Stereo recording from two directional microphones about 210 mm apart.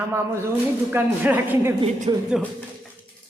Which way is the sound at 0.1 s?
10° right (ahead or behind).